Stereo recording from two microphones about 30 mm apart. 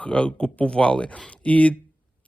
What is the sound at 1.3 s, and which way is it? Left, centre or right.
Speech, left.